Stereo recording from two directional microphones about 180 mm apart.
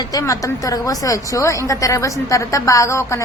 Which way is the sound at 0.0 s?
20° left (ahead or behind).